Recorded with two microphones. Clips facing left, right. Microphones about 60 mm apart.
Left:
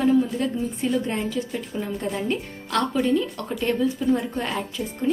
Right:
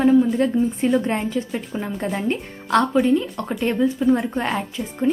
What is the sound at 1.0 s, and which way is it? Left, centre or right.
A woman's voice, right.